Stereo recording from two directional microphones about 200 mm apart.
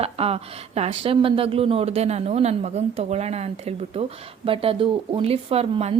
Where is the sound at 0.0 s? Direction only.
30° right (ahead or behind).